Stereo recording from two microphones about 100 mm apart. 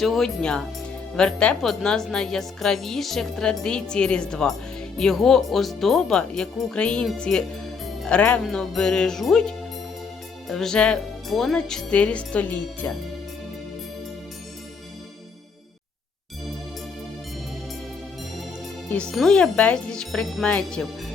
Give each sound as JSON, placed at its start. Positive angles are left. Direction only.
{"t": 0.0, "sound": "speech", "side_deg": 5}
{"t": 18.9, "sound": "speech", "side_deg": 10}